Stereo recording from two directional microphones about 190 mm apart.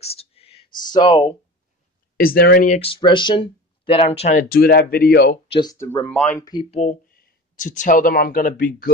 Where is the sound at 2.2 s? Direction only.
50° left (ahead or behind).